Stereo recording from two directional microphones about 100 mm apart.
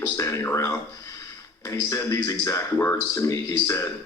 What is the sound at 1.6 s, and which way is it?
A man's voice, 30° left (ahead or behind).